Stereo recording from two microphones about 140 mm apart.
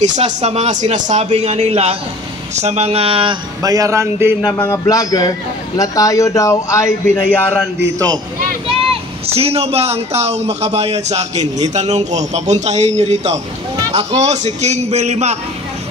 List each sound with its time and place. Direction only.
0.0 s speech: 55° right (ahead or behind); by 3.3 s 40° right (ahead or behind)
3.6 s a man's voice: 25° right (ahead or behind)
4.5 s speech: 15° left (ahead or behind)
4.8 s a man's voice: 25° left (ahead or behind)
9.2 s speech: 45° right (ahead or behind)